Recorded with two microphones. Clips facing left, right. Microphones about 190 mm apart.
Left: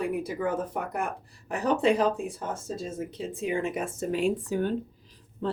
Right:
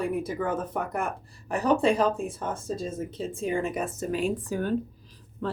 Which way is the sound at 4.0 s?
25° left (ahead or behind).